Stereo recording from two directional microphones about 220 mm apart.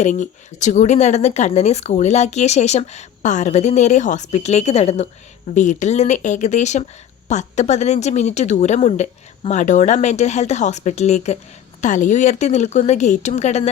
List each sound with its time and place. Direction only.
0.0 s speech: 35° left (ahead or behind)